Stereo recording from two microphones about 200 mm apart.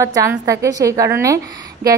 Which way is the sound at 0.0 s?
15° right (ahead or behind).